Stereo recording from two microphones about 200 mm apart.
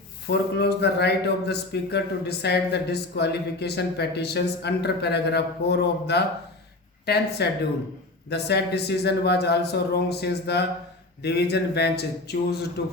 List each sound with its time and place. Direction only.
0.3 s speech: 55° left (ahead or behind)